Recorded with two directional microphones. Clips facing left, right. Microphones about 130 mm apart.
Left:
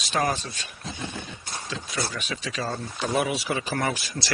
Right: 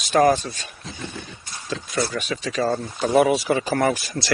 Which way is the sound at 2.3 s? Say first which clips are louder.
Right 8 dB; 40° right (ahead or behind).